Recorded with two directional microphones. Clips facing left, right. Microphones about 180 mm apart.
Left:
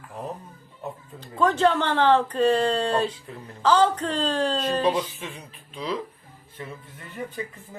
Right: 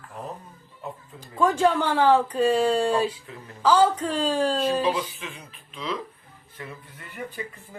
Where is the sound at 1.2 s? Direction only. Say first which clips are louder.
Even; 10° right (ahead or behind).